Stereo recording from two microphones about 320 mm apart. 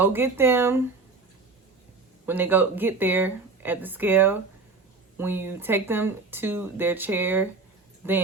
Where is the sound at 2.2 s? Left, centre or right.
Centre.